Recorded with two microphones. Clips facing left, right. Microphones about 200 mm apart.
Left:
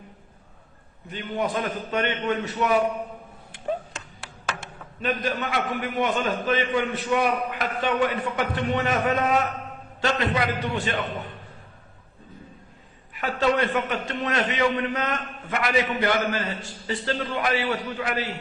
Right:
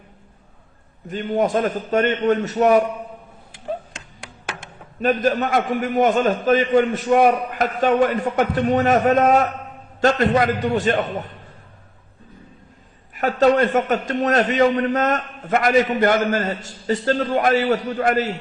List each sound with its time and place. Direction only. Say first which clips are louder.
1.0 s a man's voice: right 7 dB; 45° right (ahead or behind)
5.0 s a man's voice: right 8 dB; 45° right (ahead or behind)
13.1 s a man's voice: right 7 dB; 45° right (ahead or behind)